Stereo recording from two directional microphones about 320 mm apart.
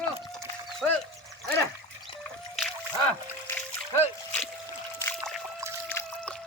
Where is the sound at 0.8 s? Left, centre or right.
Centre.